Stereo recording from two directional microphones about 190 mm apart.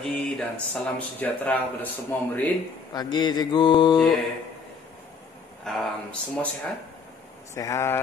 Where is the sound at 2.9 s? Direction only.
20° left (ahead or behind).